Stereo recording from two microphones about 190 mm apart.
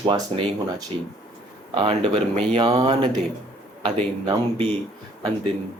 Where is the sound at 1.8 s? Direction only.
30° right (ahead or behind).